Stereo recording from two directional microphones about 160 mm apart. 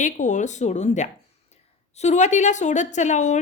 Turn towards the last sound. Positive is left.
turn(degrees=50)  # may be behind; listen again after turning